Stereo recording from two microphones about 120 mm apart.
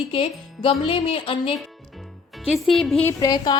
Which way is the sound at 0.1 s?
50° left (ahead or behind).